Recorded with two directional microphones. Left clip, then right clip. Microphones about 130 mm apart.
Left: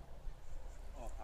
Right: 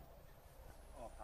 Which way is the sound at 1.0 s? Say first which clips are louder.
Left 1 dB; 25° right (ahead or behind).